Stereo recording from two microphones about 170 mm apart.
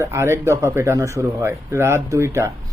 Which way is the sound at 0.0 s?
15° right (ahead or behind).